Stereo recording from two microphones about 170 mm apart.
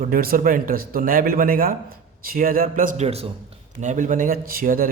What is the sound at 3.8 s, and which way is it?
Speech, 45° right (ahead or behind).